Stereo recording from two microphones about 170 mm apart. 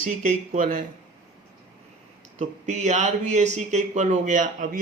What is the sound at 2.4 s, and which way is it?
Speech, 45° right (ahead or behind).